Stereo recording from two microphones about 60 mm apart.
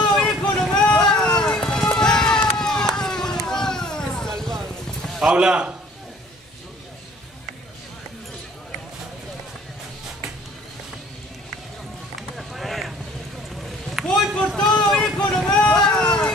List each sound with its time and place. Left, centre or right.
0.1 s vehicle: centre
1.2 s run: centre
3.0 s a sound: centre
5.2 s a man's voice: centre
12.2 s run: centre
14.0 s run: centre
14.7 s run: centre